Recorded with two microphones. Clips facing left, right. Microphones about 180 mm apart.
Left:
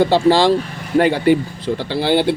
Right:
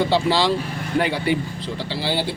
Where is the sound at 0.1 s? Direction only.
45° left (ahead or behind).